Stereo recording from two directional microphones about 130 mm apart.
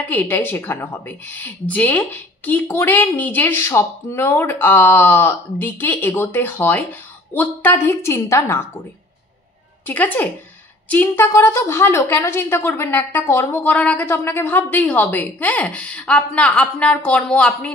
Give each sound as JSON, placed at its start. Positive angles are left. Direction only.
{"t": 0.1, "sound": "a woman's voice", "side_deg": 15}
{"t": 9.8, "sound": "a woman's voice", "side_deg": 15}